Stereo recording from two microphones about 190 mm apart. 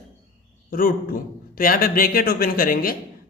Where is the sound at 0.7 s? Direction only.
50° left (ahead or behind).